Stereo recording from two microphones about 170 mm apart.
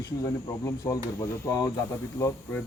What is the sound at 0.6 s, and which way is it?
Speech, 20° left (ahead or behind).